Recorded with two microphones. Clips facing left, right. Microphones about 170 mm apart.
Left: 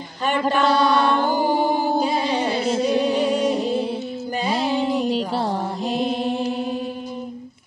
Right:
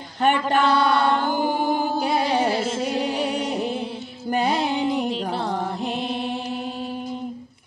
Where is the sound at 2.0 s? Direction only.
60° right (ahead or behind).